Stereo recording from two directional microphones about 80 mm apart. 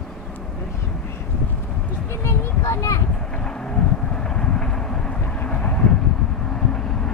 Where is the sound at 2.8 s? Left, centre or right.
Left.